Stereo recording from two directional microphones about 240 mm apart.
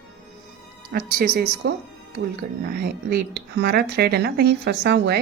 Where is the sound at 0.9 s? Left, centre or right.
Right.